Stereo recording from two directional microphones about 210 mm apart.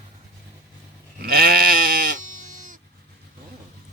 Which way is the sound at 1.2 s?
45° right (ahead or behind).